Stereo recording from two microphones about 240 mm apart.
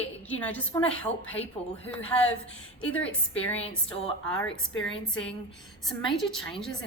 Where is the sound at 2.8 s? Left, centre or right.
Centre.